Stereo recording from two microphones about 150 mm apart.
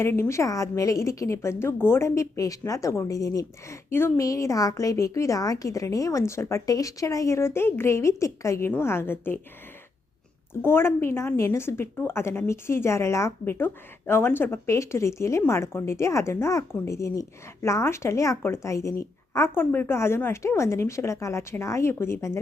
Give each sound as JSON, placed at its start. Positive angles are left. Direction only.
{"t": 0.0, "sound": "a woman's voice", "side_deg": 20}
{"t": 10.5, "sound": "a woman's voice", "side_deg": 15}